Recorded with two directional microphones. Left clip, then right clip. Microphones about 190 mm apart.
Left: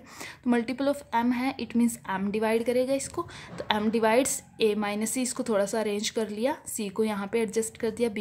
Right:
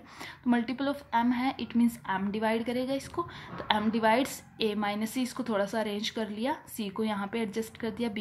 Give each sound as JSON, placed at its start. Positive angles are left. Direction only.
{"t": 0.2, "sound": "a woman's voice", "side_deg": 40}